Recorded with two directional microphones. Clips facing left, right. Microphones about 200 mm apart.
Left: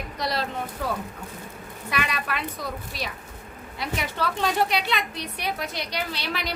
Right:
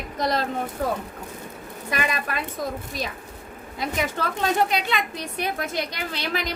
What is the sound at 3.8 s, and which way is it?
Speech, 45° right (ahead or behind).